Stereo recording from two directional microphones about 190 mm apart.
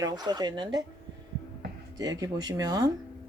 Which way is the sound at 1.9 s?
20° right (ahead or behind).